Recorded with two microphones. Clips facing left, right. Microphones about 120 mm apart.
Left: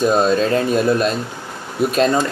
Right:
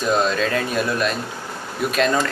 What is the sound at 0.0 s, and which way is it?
Speech, 25° left (ahead or behind).